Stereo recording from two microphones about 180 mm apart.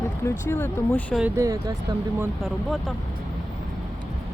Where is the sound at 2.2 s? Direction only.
Centre (ahead or behind).